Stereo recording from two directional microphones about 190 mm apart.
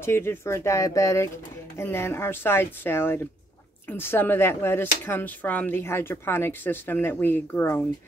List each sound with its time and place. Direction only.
0.0 s speech: 15° left (ahead or behind)